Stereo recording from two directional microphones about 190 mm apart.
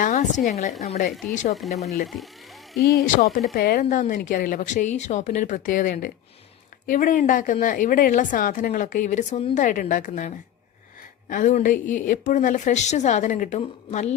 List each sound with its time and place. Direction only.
0.0 s a woman's voice: 40° left (ahead or behind)
1.5 s speech: centre (ahead or behind)
3.2 s a woman's voice: 50° left (ahead or behind); by 14.1 s 35° left (ahead or behind)